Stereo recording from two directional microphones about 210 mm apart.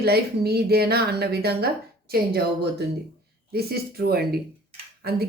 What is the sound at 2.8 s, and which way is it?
Speech, 50° right (ahead or behind).